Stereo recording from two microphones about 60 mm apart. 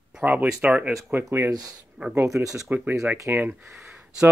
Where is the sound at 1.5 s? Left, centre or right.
Right.